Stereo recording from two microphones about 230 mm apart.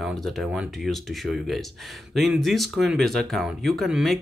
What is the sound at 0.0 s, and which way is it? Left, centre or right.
Speech, centre.